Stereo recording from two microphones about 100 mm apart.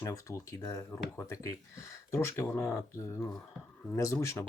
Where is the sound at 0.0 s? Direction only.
35° left (ahead or behind).